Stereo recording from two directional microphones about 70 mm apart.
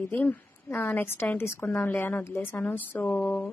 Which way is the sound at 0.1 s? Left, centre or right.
Left.